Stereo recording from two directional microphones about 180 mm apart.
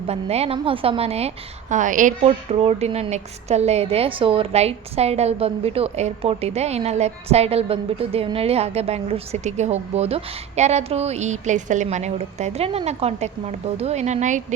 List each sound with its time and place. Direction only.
0.1 s a woman's voice: 35° right (ahead or behind)
1.7 s a woman's voice: 45° right (ahead or behind)
2.2 s a woman's voice: 35° right (ahead or behind)